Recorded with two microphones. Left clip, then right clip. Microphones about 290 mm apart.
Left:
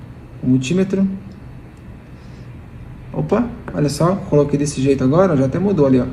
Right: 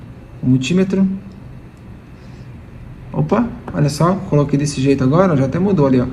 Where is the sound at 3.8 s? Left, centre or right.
Right.